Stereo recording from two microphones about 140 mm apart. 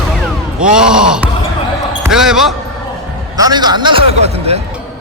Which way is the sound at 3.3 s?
30° right (ahead or behind).